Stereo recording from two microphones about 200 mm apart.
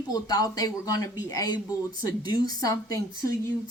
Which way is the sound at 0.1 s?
20° left (ahead or behind).